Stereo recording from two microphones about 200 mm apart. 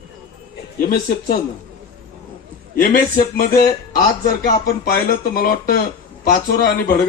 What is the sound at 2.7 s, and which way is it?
A man's voice, 45° left (ahead or behind).